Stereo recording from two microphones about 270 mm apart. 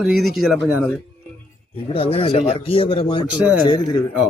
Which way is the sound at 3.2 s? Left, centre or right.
Centre.